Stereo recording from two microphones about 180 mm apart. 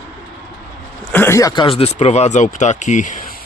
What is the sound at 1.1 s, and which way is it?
Speech, 15° left (ahead or behind).